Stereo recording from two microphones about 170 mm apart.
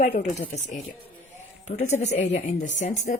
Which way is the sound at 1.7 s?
40° left (ahead or behind).